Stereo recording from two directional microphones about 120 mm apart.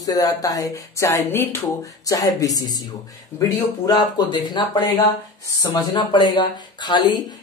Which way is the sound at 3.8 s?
35° left (ahead or behind).